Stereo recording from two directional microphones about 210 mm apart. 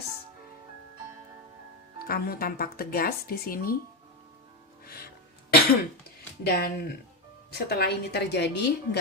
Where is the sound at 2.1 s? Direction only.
45° left (ahead or behind).